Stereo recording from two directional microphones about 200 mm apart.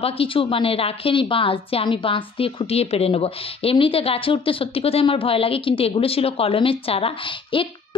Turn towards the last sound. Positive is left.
turn(degrees=25)  # may be behind; listen again after turning